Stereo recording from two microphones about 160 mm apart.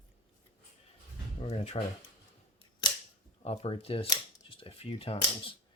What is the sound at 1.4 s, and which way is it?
Speech, 40° left (ahead or behind).